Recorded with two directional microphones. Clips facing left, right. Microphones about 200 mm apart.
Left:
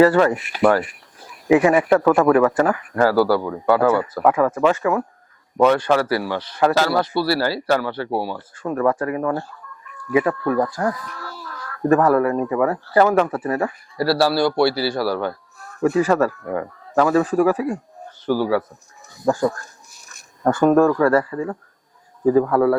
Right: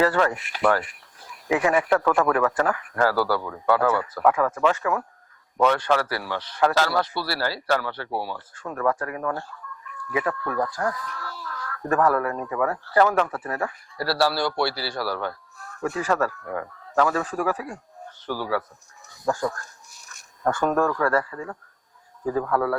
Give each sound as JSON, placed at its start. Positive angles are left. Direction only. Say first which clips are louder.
{"t": 0.0, "sound": "speech", "louder": "left 7 dB", "side_deg": 10}
{"t": 8.6, "sound": "speech", "louder": "left 6 dB", "side_deg": 20}
{"t": 10.7, "sound": "chicken", "louder": "left 4 dB", "side_deg": 10}
{"t": 11.9, "sound": "speech", "louder": "left 6 dB", "side_deg": 20}
{"t": 16.1, "sound": "speech", "louder": "left 6 dB", "side_deg": 20}
{"t": 19.3, "sound": "speech", "louder": "left 6 dB", "side_deg": 20}
{"t": 20.6, "sound": "speech", "louder": "left 9 dB", "side_deg": 20}